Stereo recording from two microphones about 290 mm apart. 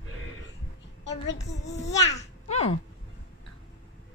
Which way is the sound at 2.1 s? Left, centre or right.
Left.